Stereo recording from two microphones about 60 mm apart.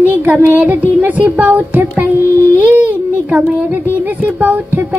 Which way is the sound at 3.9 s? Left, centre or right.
Right.